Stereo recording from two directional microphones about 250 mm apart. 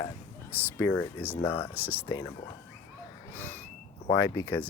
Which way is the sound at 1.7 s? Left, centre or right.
Centre.